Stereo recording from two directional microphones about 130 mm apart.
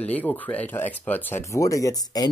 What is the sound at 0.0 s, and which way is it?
Speech, 10° left (ahead or behind).